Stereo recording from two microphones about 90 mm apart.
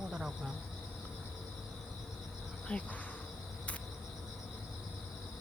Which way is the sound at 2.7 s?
15° left (ahead or behind).